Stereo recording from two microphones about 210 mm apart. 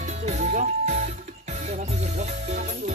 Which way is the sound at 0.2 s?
35° right (ahead or behind).